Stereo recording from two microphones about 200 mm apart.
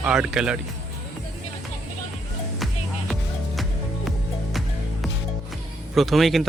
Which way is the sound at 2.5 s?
Centre (ahead or behind).